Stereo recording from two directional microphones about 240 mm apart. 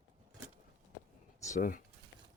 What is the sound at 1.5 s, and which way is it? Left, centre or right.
Speech, left.